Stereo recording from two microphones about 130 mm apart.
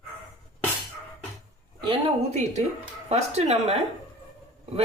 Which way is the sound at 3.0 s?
60° right (ahead or behind).